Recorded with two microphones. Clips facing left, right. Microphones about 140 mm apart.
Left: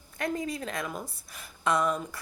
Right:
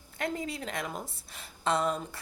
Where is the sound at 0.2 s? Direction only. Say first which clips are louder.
Left 2 dB; 25° right (ahead or behind).